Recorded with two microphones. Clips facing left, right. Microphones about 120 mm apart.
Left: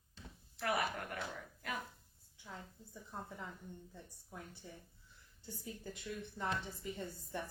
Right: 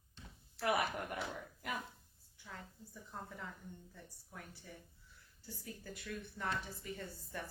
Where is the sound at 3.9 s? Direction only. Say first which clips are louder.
Left 2 dB; 20° left (ahead or behind).